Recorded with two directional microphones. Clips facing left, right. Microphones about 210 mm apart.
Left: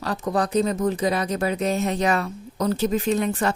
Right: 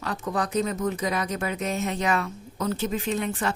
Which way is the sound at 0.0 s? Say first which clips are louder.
Left 4 dB; 35° left (ahead or behind).